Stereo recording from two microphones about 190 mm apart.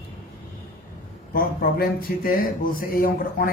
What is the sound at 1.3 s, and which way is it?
Speech, 50° left (ahead or behind).